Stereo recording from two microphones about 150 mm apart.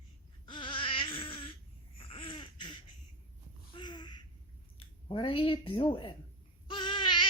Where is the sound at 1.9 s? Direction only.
35° left (ahead or behind).